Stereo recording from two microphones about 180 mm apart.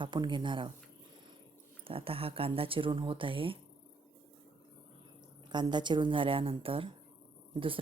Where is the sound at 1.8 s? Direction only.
30° right (ahead or behind).